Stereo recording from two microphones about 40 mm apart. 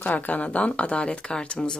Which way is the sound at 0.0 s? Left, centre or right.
Left.